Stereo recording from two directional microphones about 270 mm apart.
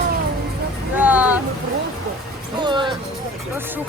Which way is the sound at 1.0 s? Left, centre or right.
Centre.